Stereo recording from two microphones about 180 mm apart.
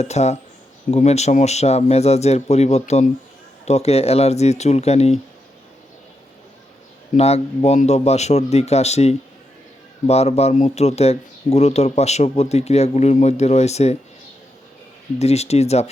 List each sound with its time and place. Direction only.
0.0 s speech: 40° left (ahead or behind)
7.2 s speech: 35° left (ahead or behind)
15.2 s speech: 35° left (ahead or behind)